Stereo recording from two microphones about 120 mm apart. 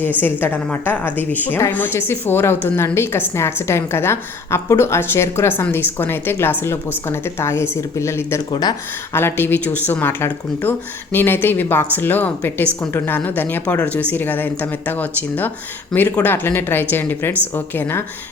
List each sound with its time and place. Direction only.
0.2 s a woman's voice: 15° left (ahead or behind)
8.4 s speech: 35° left (ahead or behind)
9.1 s speech: 20° left (ahead or behind)